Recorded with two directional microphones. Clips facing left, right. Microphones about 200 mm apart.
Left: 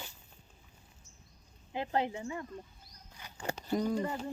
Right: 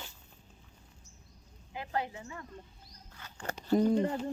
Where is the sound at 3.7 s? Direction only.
25° right (ahead or behind).